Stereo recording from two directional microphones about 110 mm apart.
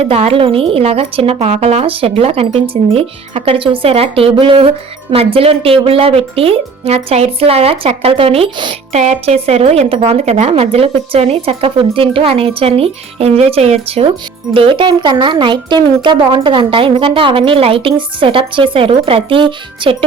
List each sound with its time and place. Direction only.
0.0 s speech: 60° right (ahead or behind)
8.9 s speech: 80° right; by 14.1 s 65° right (ahead or behind)
14.5 s speech: 50° right (ahead or behind)